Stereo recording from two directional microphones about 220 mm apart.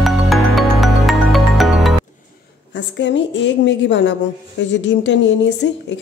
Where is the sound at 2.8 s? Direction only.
55° left (ahead or behind).